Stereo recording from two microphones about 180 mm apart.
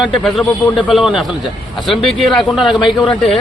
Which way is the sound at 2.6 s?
25° left (ahead or behind).